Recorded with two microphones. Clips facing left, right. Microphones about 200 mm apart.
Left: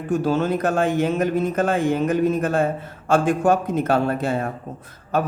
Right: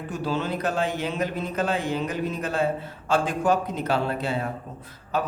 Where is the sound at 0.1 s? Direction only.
50° left (ahead or behind).